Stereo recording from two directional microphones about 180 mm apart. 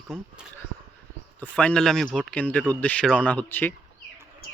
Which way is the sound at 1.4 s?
5° left (ahead or behind).